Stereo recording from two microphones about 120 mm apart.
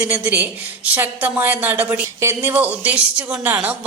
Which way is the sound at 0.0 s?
15° right (ahead or behind).